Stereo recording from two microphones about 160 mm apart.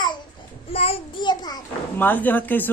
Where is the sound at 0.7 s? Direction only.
40° left (ahead or behind).